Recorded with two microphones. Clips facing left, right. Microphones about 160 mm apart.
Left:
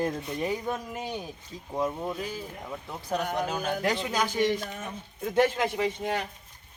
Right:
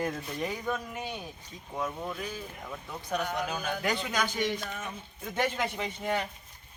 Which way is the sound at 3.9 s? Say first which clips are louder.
Left 3 dB; 25° left (ahead or behind).